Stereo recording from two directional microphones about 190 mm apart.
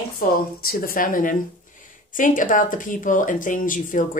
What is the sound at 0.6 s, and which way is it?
Speech, 50° left (ahead or behind).